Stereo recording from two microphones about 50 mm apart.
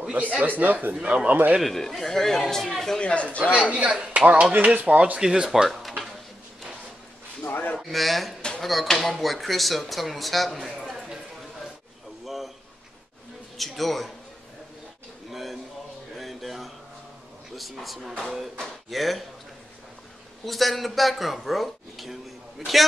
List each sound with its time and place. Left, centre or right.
0.1 s speech: right
0.9 s speech: centre
1.6 s speech: centre
3.0 s speech: left
3.9 s speech: centre
5.2 s speech: centre
5.7 s drawer open or close: centre
7.4 s a sound: left
7.8 s speech: centre
13.6 s speech: centre
15.2 s a sound: centre
17.6 s speech: centre
20.4 s speech: centre